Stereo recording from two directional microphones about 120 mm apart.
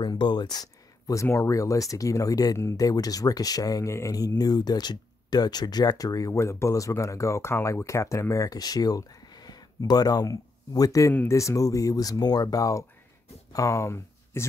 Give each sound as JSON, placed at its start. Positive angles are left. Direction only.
{"t": 0.0, "sound": "speech", "side_deg": 40}